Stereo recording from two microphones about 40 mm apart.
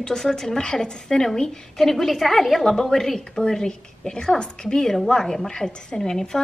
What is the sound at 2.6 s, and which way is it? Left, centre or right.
A woman's voice, centre.